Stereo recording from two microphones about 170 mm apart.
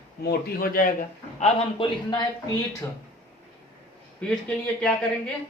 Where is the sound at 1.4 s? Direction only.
30° left (ahead or behind).